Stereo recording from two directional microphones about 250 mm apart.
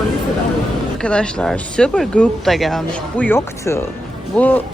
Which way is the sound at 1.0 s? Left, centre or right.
Centre.